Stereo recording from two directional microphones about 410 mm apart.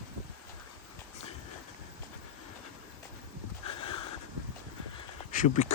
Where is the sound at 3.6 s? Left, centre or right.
Centre.